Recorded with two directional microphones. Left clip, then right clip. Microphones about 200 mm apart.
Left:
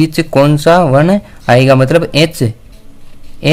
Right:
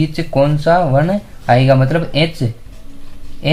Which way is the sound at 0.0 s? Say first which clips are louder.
Left 5 dB; 50° left (ahead or behind).